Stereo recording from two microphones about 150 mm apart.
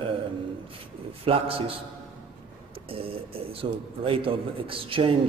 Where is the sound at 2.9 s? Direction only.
40° right (ahead or behind).